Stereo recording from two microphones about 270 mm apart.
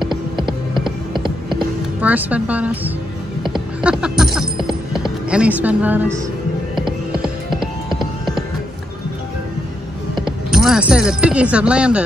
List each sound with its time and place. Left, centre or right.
0.0 s music: centre
1.6 s speech: centre
3.4 s music: centre
5.6 s speech: centre
8.0 s music: centre
10.5 s speech: centre